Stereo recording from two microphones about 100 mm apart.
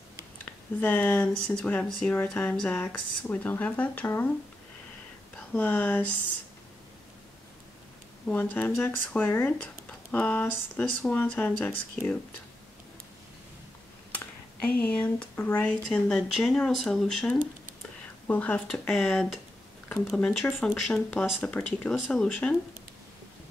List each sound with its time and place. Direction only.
0.5 s speech: 15° left (ahead or behind)
5.5 s speech: 15° left (ahead or behind)
8.3 s speech: 15° left (ahead or behind)
14.1 s speech: 15° left (ahead or behind)
18.9 s speech: 5° left (ahead or behind)